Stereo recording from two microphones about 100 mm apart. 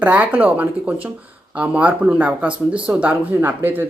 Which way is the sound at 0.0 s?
15° right (ahead or behind).